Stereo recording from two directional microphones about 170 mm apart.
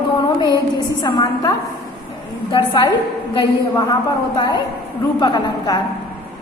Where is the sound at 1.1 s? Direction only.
25° left (ahead or behind).